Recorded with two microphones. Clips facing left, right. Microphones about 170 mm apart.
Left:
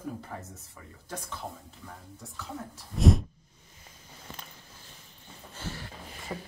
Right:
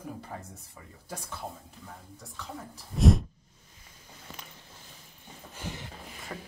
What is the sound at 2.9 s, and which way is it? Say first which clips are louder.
Speech: even; centre (ahead or behind).